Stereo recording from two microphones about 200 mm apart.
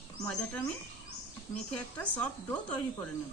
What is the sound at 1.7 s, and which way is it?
A woman's voice, 5° left (ahead or behind).